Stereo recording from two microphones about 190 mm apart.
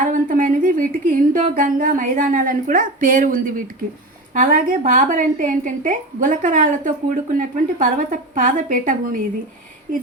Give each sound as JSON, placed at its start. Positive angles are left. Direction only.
{"t": 0.0, "sound": "a woman's voice", "side_deg": -45}